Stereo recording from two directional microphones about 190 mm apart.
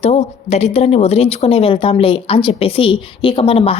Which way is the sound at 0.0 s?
35° left (ahead or behind).